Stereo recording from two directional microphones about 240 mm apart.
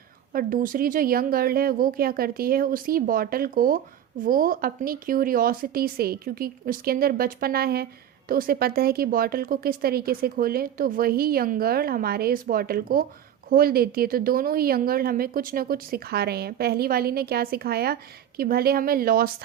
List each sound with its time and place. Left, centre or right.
0.3 s speech: right